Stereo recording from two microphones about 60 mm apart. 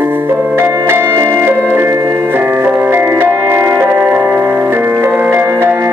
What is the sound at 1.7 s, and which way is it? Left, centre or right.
Organ, right.